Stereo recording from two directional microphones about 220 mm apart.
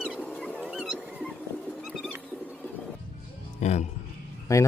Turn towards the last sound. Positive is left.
turn(degrees=15)  # may be behind; listen again after turning